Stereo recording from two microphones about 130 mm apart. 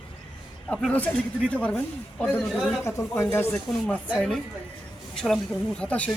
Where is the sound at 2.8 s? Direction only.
20° left (ahead or behind).